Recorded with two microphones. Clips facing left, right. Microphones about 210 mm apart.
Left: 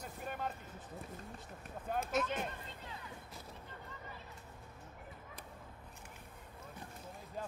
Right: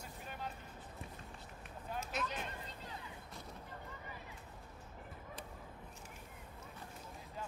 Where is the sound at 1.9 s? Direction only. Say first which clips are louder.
Left 7 dB; 50° left (ahead or behind).